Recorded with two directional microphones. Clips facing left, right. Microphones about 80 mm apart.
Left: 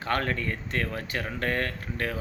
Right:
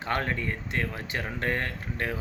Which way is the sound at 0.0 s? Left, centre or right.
Right.